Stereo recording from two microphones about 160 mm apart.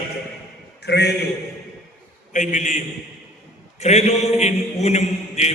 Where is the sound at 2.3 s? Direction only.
50° left (ahead or behind).